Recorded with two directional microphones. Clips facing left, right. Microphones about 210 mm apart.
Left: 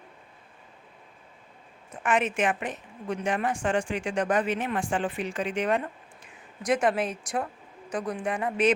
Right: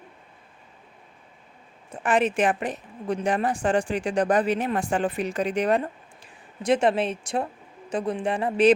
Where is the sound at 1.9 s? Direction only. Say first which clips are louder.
Right 4 dB; 35° right (ahead or behind).